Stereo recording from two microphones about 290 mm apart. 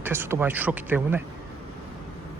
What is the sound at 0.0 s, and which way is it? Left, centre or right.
Speech, centre.